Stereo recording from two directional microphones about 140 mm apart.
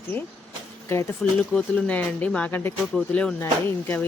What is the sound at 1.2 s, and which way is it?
Music, 5° left (ahead or behind).